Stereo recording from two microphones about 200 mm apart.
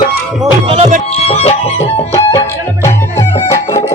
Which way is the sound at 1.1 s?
30° left (ahead or behind).